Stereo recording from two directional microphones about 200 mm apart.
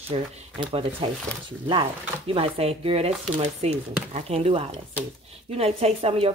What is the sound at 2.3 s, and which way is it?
Speech, 30° right (ahead or behind).